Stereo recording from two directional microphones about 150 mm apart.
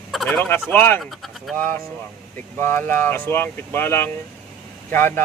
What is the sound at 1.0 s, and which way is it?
Speech, centre (ahead or behind).